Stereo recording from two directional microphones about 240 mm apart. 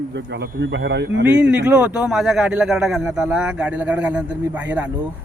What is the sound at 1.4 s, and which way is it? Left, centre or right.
Speech, centre.